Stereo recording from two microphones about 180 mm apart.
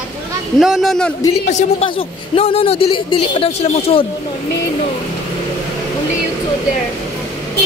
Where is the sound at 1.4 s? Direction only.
40° left (ahead or behind).